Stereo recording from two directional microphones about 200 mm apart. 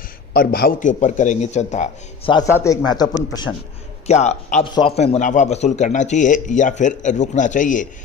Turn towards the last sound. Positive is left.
turn(degrees=40)  # may be behind; listen again after turning